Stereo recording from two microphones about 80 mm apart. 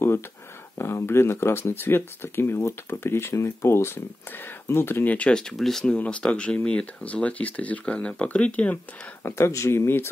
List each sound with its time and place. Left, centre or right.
0.7 s speech: left
5.1 s speech: centre
9.2 s speech: left